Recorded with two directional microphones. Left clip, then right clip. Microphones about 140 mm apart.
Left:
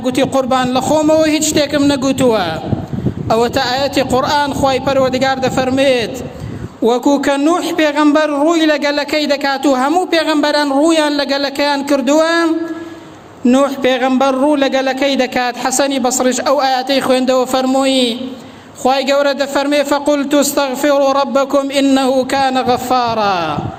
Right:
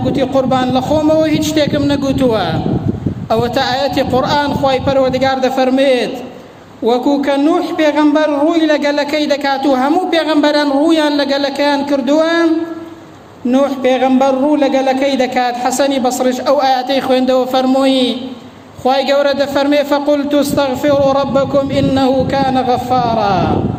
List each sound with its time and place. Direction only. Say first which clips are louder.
0.0 s a man's voice: right 1 dB; 40° left (ahead or behind)